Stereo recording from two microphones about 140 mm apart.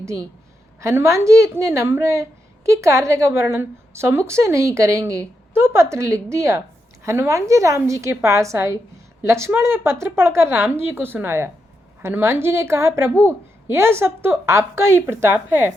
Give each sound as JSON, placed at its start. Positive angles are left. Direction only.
{"t": 0.0, "sound": "a woman's voice", "side_deg": -20}